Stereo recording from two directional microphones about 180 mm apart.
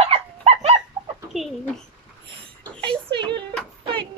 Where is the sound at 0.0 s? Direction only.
35° right (ahead or behind).